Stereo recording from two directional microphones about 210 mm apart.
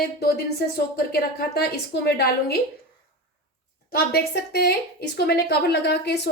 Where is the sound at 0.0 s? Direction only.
50° left (ahead or behind).